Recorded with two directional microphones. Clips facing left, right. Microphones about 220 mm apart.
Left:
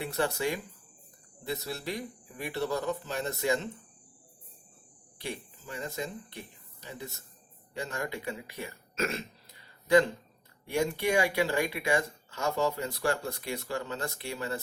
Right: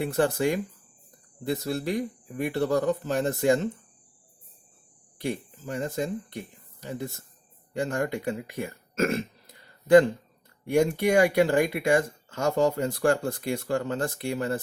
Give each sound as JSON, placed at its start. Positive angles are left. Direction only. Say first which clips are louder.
{"t": 0.0, "sound": "speech", "louder": "right 6 dB", "side_deg": -50}
{"t": 5.2, "sound": "speech", "louder": "right 8 dB", "side_deg": -50}